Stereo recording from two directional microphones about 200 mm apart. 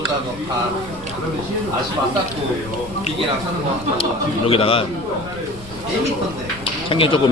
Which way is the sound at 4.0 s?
30° left (ahead or behind).